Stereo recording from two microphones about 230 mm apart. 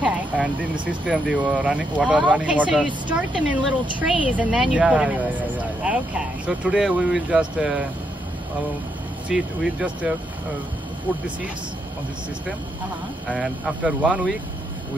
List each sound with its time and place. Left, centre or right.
0.0 s speech: centre
9.3 s speech: centre
13.3 s speech: centre